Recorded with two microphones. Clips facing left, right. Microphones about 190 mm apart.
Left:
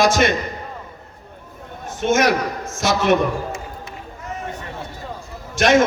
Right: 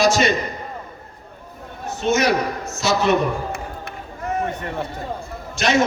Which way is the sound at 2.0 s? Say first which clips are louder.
Left 1 dB; 60° left (ahead or behind).